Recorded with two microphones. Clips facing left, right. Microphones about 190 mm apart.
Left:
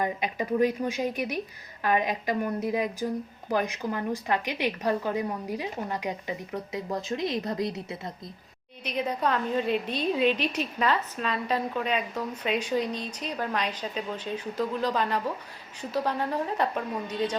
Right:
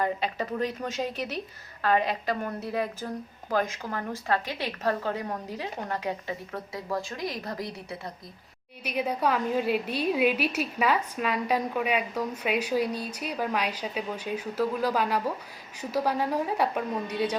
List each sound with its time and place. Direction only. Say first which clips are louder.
0.0 s a woman's voice: even; 15° left (ahead or behind)
8.8 s a woman's voice: right 1 dB; 10° right (ahead or behind)